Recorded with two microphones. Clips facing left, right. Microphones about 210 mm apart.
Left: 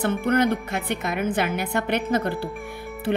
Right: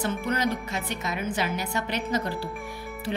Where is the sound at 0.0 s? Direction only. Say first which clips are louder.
Left 6 dB; 55° left (ahead or behind).